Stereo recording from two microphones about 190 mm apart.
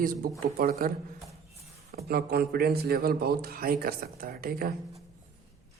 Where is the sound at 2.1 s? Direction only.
55° right (ahead or behind).